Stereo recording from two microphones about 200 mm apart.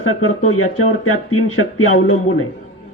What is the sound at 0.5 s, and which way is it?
Speech, 90° left.